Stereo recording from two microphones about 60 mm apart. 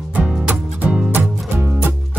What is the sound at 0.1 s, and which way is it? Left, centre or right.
Music, centre.